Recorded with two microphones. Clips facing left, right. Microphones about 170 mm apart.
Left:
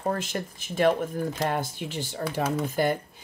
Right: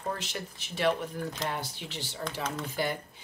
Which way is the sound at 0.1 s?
50° left (ahead or behind).